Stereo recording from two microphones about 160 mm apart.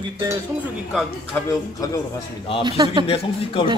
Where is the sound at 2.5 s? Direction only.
35° left (ahead or behind).